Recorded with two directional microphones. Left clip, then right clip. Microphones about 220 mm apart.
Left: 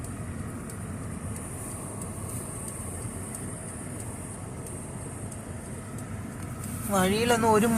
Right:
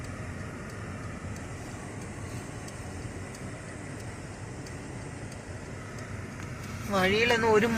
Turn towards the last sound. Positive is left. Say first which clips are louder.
# left 1 dB
turn(degrees=15)  # may be behind; listen again after turning